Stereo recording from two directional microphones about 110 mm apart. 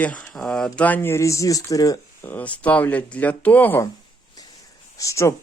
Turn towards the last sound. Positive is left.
turn(degrees=25)  # may be behind; listen again after turning